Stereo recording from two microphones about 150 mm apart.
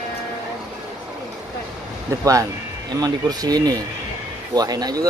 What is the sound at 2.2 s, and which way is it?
Speech, 20° right (ahead or behind).